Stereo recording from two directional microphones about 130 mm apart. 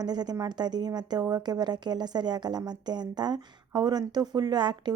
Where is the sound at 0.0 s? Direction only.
30° right (ahead or behind).